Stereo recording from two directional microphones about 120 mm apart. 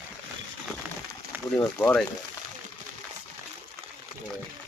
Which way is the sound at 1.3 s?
15° right (ahead or behind).